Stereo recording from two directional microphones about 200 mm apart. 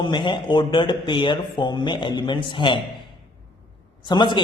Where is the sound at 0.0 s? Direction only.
25° left (ahead or behind).